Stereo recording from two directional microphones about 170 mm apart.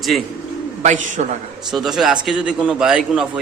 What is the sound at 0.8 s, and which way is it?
Speech, 45° right (ahead or behind).